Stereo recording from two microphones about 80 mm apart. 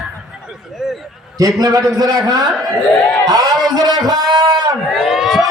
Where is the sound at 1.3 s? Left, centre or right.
Right.